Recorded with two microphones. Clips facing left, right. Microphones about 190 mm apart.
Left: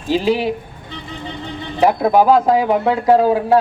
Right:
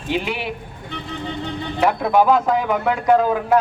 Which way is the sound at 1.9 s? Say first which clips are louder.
Left 3 dB; 35° left (ahead or behind).